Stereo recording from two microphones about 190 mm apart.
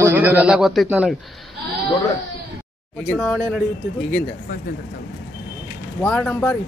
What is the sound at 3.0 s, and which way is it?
Speech, 5° left (ahead or behind).